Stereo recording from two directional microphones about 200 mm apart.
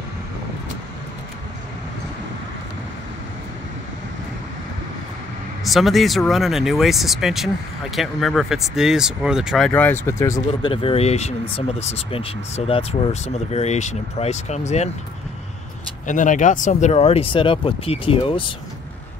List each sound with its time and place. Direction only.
5.6 s speech: centre (ahead or behind)
9.7 s speech: 10° left (ahead or behind)
10.7 s speech: 25° left (ahead or behind)
16.1 s speech: 40° left (ahead or behind)